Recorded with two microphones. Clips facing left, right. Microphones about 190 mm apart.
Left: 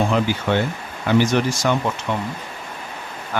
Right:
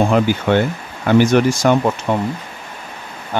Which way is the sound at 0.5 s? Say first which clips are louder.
Right 5 dB; 55° right (ahead or behind).